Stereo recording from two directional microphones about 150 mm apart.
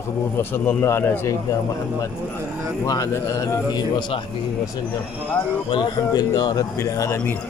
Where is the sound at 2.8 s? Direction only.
25° left (ahead or behind).